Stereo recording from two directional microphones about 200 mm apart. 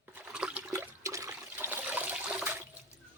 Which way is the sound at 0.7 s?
15° right (ahead or behind).